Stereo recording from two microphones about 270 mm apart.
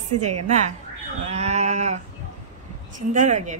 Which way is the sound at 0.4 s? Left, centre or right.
Right.